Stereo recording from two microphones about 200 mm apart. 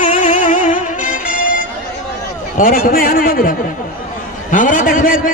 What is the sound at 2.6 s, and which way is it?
Speech, 45° left (ahead or behind).